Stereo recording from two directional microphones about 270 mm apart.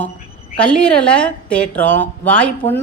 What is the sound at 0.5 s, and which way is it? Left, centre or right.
A woman's voice, centre.